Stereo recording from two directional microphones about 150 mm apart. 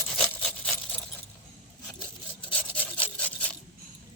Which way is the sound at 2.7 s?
10° left (ahead or behind).